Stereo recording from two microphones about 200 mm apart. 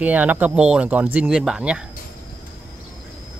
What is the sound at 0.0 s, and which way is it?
Speech, 10° right (ahead or behind).